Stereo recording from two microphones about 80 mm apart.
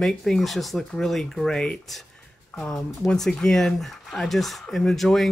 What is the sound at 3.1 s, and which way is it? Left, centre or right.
Speech, centre.